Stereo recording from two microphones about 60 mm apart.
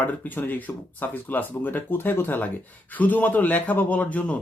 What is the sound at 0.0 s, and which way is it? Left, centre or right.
Speech, left.